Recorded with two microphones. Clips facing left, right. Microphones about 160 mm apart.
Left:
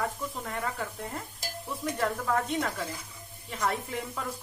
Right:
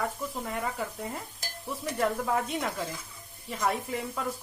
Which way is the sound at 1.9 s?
10° right (ahead or behind).